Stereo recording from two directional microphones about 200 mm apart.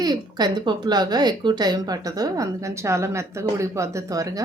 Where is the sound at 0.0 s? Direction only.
20° right (ahead or behind).